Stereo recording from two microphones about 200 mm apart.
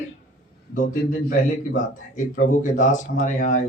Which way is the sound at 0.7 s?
40° left (ahead or behind).